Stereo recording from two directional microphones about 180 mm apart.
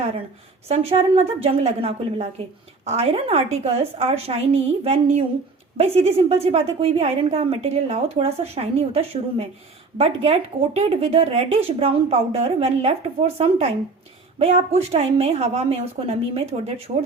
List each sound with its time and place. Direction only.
0.7 s a woman's voice: 35° right (ahead or behind)
10.8 s a woman's voice: 35° right (ahead or behind)